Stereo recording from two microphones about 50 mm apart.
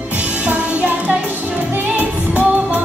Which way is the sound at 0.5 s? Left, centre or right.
Right.